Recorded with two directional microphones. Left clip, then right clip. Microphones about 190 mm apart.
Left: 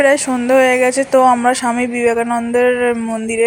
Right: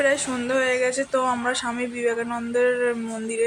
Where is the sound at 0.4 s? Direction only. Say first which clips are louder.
Left 11 dB; 30° left (ahead or behind).